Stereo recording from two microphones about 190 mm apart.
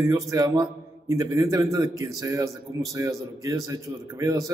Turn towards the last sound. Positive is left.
turn(degrees=-20)  # may be behind; listen again after turning